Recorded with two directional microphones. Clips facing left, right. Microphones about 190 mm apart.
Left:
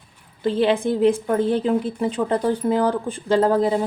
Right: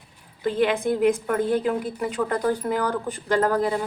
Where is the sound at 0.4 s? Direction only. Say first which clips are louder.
Left 3 dB; 25° left (ahead or behind).